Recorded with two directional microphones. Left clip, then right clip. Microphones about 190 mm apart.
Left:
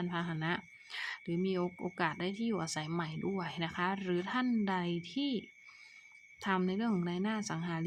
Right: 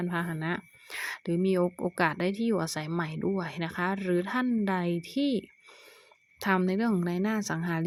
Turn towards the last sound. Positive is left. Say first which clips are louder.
# right 7 dB
turn(degrees=-30)  # may be behind; listen again after turning